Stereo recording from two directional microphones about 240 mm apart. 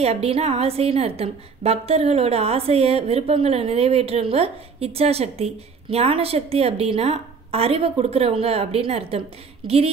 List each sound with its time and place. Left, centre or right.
0.0 s a woman's voice: right